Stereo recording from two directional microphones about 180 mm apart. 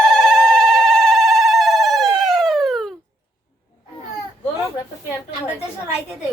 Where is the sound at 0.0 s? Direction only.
5° left (ahead or behind).